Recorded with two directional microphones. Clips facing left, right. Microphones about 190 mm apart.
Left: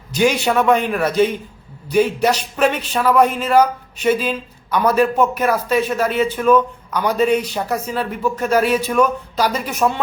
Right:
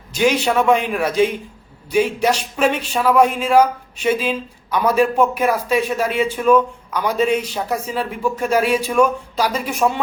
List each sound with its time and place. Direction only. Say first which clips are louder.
0.3 s a man's voice: even; 10° left (ahead or behind)
0.6 s speech: left 2 dB; 5° right (ahead or behind)